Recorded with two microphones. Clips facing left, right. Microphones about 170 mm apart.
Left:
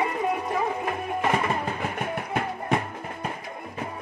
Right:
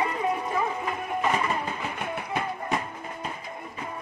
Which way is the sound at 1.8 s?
55° left (ahead or behind).